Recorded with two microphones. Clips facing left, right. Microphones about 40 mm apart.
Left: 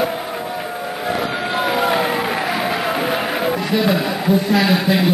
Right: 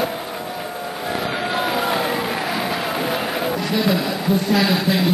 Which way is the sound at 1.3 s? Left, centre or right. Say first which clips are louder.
Left 2 dB; centre.